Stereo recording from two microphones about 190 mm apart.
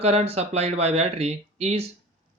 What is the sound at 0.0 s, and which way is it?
Speech, 35° right (ahead or behind).